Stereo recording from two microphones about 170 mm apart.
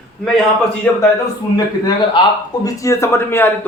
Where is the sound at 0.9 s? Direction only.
10° left (ahead or behind).